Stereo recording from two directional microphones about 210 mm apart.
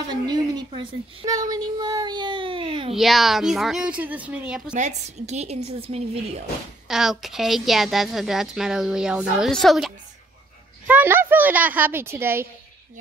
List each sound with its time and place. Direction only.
0.1 s a woman's voice: 20° right (ahead or behind)
2.9 s a woman's voice: centre (ahead or behind)
4.7 s a woman's voice: 35° right (ahead or behind)
6.9 s a woman's voice: centre (ahead or behind)